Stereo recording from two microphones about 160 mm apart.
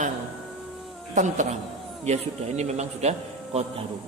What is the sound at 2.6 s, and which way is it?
A man's voice, 45° right (ahead or behind).